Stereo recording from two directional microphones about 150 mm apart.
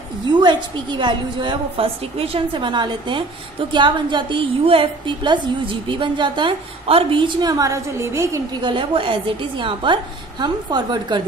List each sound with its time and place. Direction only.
0.3 s a woman's voice: 30° right (ahead or behind)
8.6 s a woman's voice: 35° right (ahead or behind)